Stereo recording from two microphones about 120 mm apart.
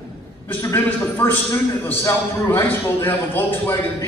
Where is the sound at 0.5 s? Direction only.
20° left (ahead or behind).